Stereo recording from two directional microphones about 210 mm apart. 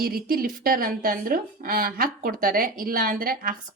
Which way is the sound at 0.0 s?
45° right (ahead or behind).